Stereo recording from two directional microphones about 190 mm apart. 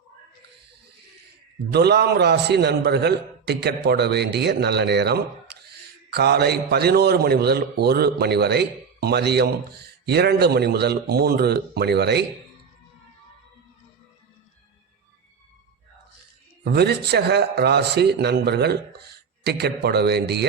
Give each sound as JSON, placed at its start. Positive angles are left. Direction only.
{"t": 1.7, "sound": "a man's voice", "side_deg": -60}
{"t": 16.6, "sound": "a man's voice", "side_deg": -60}